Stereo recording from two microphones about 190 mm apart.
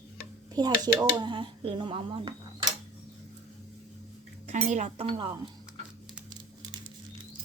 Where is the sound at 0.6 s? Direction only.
20° right (ahead or behind).